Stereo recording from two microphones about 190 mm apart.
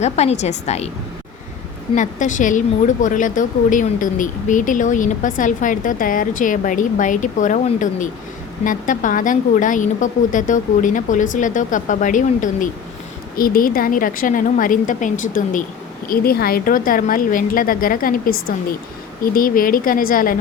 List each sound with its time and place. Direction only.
0.0 s a woman's voice: 35° left (ahead or behind)
2.0 s a woman's voice: 40° left (ahead or behind)
16.0 s a woman's voice: 50° left (ahead or behind)